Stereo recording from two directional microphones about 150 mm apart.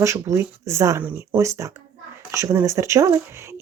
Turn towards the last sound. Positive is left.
turn(degrees=-20)  # may be behind; listen again after turning